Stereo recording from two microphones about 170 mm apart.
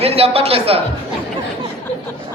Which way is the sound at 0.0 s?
35° right (ahead or behind).